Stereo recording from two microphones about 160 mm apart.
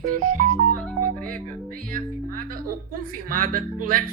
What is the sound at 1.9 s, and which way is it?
Speech, 60° right (ahead or behind).